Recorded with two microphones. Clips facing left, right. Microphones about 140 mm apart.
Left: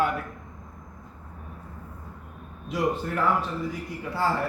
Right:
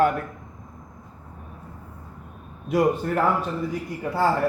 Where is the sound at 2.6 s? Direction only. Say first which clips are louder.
Right 6 dB; 50° right (ahead or behind).